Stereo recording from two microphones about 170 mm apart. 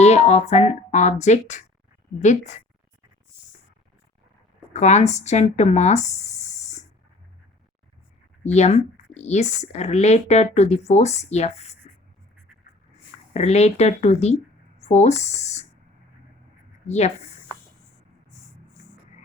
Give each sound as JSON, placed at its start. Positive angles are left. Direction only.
{"t": 0.0, "sound": "speech", "side_deg": 40}
{"t": 4.7, "sound": "speech", "side_deg": 40}
{"t": 8.4, "sound": "speech", "side_deg": 40}
{"t": 13.3, "sound": "speech", "side_deg": 40}
{"t": 16.8, "sound": "speech", "side_deg": 40}